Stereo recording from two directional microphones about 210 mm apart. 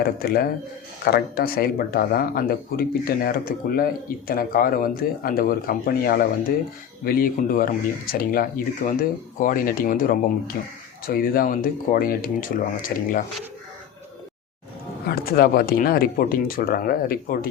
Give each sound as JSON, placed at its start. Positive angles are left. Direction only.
{"t": 0.0, "sound": "speech", "side_deg": 45}
{"t": 15.0, "sound": "speech", "side_deg": 45}